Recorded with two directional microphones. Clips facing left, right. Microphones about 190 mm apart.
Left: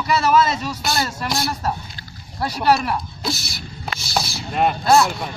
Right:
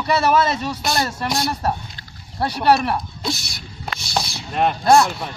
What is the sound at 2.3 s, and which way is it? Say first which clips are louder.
Speech: right 1 dB; 30° right (ahead or behind).